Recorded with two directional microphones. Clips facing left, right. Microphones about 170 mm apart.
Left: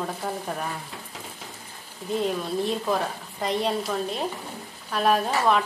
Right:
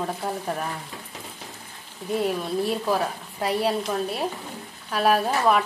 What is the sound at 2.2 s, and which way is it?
Speech, 5° right (ahead or behind).